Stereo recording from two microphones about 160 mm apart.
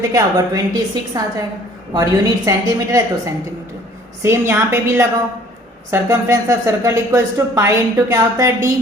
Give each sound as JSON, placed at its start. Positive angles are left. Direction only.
{"t": 0.1, "sound": "a woman's voice", "side_deg": -20}